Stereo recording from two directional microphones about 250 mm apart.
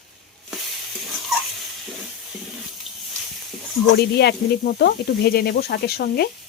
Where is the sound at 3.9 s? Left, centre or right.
Left.